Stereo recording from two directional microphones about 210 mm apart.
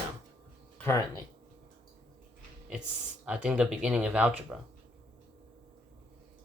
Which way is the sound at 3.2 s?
5° right (ahead or behind).